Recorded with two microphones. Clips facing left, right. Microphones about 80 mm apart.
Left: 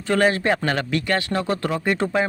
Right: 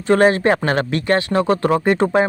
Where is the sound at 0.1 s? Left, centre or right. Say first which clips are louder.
Right 5 dB; right.